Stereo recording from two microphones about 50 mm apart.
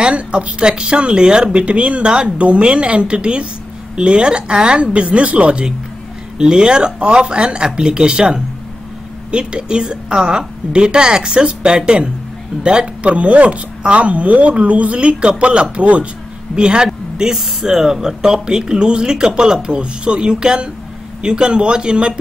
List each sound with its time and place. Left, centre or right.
0.0 s speech: right